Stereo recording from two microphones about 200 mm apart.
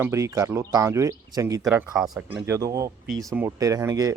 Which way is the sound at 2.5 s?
15° right (ahead or behind).